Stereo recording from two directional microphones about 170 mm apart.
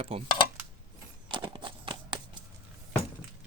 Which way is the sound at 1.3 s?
30° right (ahead or behind).